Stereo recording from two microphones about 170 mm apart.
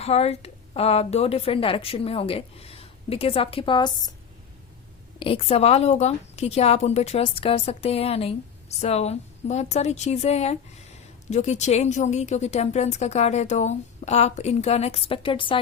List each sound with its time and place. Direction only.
0.0 s a woman's voice: 40° left (ahead or behind)
5.2 s a woman's voice: 35° left (ahead or behind)